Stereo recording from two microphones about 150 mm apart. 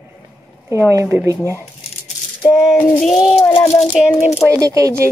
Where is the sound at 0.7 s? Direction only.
20° right (ahead or behind).